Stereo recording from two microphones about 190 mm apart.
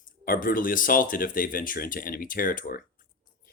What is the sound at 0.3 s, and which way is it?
Speech, 45° left (ahead or behind).